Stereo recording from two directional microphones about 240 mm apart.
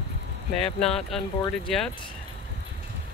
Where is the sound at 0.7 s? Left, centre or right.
Centre.